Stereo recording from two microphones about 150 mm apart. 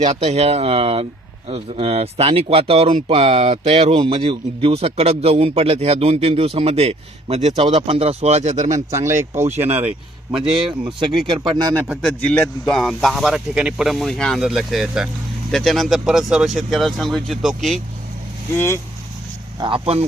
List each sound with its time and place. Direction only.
0.0 s speech: 45° right (ahead or behind)
8.9 s speech: 15° right (ahead or behind)
11.0 s speech: 30° right (ahead or behind)
12.0 s speech: 10° left (ahead or behind)
18.5 s speech: 15° left (ahead or behind)
19.5 s speech: 35° right (ahead or behind)